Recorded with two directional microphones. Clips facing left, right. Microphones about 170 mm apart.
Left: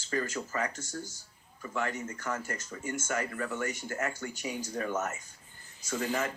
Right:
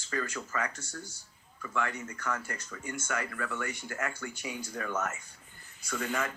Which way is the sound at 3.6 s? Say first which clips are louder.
Left 2 dB; 40° left (ahead or behind).